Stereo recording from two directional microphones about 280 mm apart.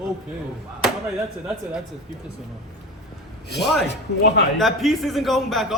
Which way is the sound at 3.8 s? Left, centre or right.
Left.